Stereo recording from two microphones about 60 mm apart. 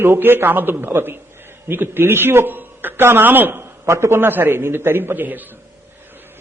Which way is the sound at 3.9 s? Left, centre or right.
Right.